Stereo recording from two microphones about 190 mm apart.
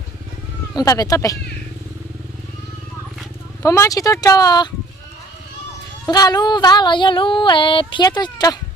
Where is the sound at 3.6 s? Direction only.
15° left (ahead or behind).